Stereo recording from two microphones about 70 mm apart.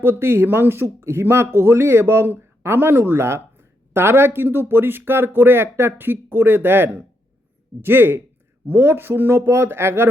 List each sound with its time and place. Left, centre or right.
0.0 s speech: right